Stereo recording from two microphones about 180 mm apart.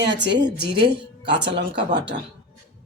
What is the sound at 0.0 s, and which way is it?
Speech, 80° right.